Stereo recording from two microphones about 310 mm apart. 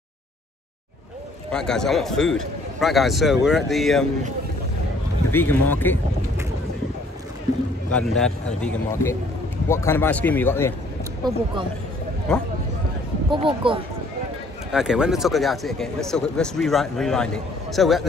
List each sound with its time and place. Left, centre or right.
1.5 s speech: centre
5.3 s speech: centre
7.9 s speech: centre
12.3 s speech: centre
13.3 s speech: centre
14.7 s speech: centre